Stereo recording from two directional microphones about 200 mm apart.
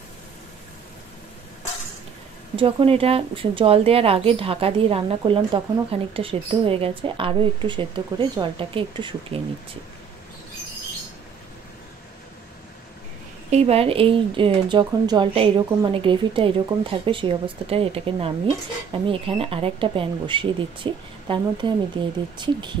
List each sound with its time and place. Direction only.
2.5 s a woman's voice: 25° right (ahead or behind)
13.5 s a woman's voice: 30° right (ahead or behind)